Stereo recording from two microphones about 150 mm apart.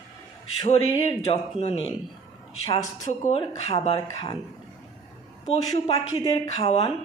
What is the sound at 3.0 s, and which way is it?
Speech, 50° left (ahead or behind).